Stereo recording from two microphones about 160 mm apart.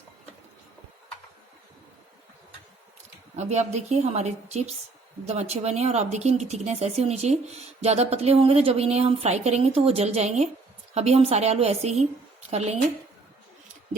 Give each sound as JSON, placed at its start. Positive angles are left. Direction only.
{"t": 3.3, "sound": "a woman's voice", "side_deg": -45}